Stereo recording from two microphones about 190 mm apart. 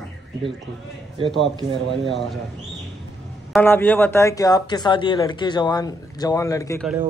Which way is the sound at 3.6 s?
10° left (ahead or behind).